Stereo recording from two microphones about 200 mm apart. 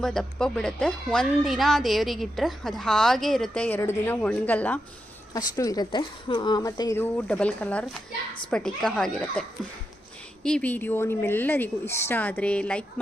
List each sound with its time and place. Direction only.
0.0 s speech: centre (ahead or behind)
10.4 s speech: 5° left (ahead or behind)